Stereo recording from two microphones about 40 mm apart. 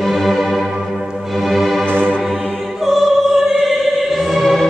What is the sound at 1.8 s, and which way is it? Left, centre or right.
Music, right.